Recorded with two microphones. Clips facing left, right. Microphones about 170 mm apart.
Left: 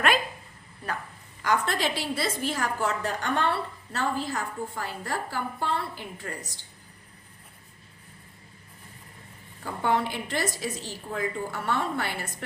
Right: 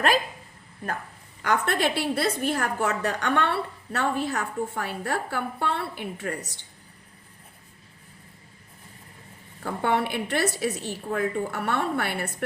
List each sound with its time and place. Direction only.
1.4 s a woman's voice: 60° right (ahead or behind)
9.6 s a woman's voice: 65° right (ahead or behind)